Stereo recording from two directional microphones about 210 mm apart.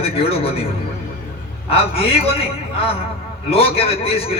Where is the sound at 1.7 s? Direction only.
30° left (ahead or behind).